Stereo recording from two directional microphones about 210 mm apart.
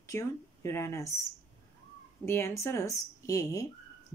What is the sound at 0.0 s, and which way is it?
Speech, 15° left (ahead or behind).